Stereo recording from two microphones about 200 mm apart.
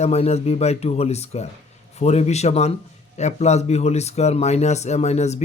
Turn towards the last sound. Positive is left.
turn(degrees=35)  # may be behind; listen again after turning